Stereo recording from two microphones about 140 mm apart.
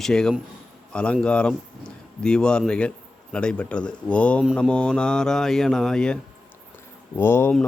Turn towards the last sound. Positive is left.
turn(degrees=15)  # may be behind; listen again after turning